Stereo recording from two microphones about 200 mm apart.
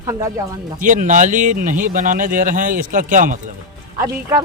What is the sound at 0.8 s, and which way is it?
Speech, 40° right (ahead or behind).